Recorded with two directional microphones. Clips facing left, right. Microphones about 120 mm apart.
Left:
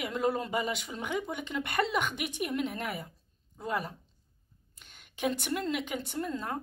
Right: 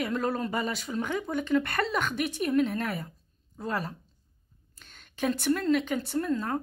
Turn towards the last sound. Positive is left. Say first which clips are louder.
# right 6 dB
turn(degrees=15)  # may be behind; listen again after turning